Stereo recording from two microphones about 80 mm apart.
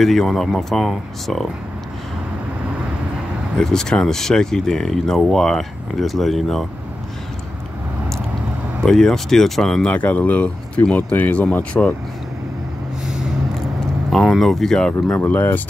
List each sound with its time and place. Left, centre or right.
0.0 s speech: centre
3.5 s speech: centre
8.8 s speech: centre
9.8 s speech: centre
13.0 s vehicle: centre
13.7 s speech: centre
15.2 s speech: left